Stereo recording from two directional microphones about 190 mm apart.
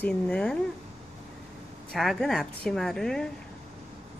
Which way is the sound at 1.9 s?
Centre (ahead or behind).